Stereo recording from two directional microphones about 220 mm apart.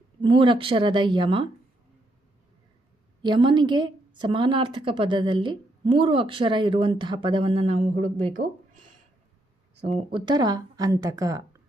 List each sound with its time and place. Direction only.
0.2 s a woman's voice: 20° right (ahead or behind)
3.2 s a woman's voice: 20° right (ahead or behind)
9.8 s speech: 25° right (ahead or behind)